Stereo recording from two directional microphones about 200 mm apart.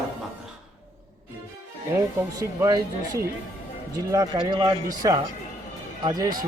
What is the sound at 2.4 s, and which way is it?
Speech, 15° right (ahead or behind).